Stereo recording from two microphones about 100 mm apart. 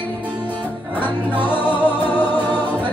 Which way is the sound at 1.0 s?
20° left (ahead or behind).